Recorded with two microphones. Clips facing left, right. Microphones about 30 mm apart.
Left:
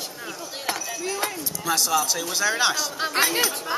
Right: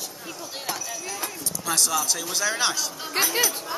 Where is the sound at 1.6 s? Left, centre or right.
Centre.